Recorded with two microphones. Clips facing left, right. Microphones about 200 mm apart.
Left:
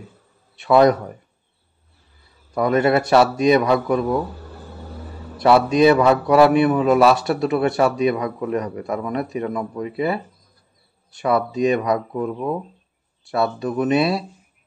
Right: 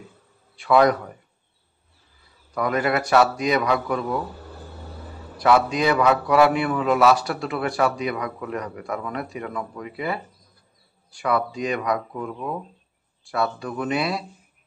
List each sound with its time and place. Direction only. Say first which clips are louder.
0.6 s a man's voice: left 3 dB; 25° left (ahead or behind)
2.5 s a man's voice: left 6 dB; 25° left (ahead or behind)
5.4 s a man's voice: left 5 dB; 25° left (ahead or behind)